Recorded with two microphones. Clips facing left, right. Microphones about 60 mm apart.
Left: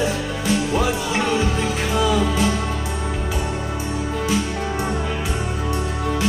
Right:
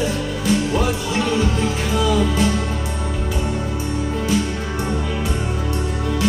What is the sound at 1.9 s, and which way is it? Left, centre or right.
Music, left.